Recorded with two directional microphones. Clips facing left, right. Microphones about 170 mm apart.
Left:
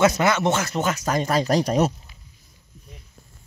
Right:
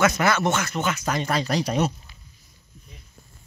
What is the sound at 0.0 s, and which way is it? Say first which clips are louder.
Speech: left 2 dB; 20° left (ahead or behind).